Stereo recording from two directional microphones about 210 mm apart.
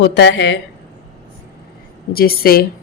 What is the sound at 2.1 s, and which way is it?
Speech, 45° left (ahead or behind).